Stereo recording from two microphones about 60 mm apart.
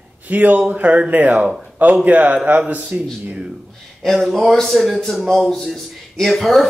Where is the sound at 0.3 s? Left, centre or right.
Right.